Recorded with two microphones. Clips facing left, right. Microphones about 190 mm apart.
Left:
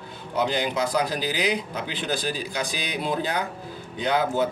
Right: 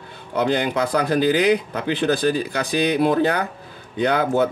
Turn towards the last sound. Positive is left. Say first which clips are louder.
# right 5 dB
turn(degrees=-60)  # may be behind; listen again after turning